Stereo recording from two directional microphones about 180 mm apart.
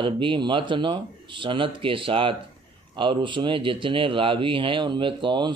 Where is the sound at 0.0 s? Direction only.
30° right (ahead or behind).